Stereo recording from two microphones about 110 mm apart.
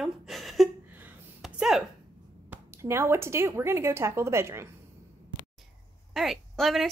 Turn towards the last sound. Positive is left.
turn(degrees=0)  # may be behind; listen again after turning